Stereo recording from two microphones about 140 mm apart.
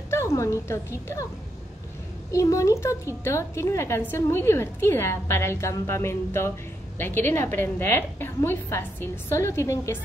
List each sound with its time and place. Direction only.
0.1 s a woman's voice: 20° left (ahead or behind)
2.3 s a woman's voice: 20° left (ahead or behind)